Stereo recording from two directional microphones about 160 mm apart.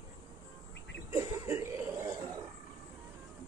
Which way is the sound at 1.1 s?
15° right (ahead or behind).